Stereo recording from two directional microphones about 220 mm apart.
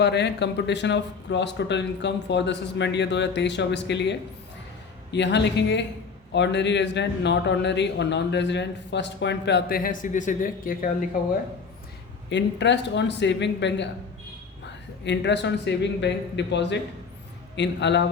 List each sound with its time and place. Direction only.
0.0 s speech: 50° left (ahead or behind)
12.3 s speech: 55° left (ahead or behind)
15.0 s speech: 55° left (ahead or behind)